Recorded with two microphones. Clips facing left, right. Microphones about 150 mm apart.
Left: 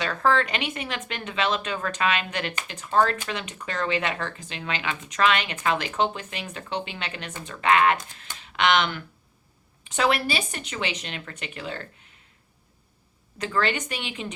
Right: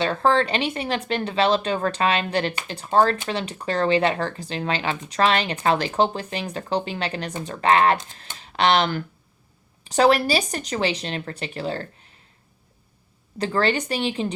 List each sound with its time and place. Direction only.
0.0 s speech: 30° right (ahead or behind)
13.4 s speech: 35° right (ahead or behind)